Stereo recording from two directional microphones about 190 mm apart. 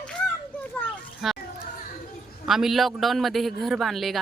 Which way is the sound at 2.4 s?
Centre (ahead or behind).